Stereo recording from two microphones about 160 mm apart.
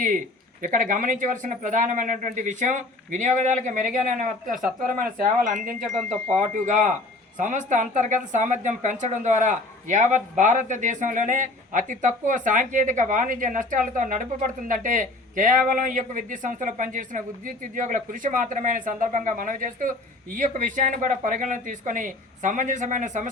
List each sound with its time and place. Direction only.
0.6 s a woman's voice: 55° right (ahead or behind)